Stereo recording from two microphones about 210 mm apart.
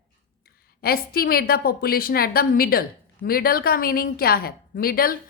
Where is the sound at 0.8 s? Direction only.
45° left (ahead or behind).